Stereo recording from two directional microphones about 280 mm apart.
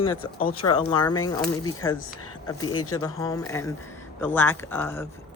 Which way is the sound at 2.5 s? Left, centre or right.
Centre.